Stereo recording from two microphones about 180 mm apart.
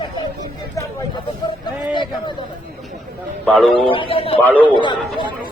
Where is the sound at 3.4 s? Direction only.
5° left (ahead or behind).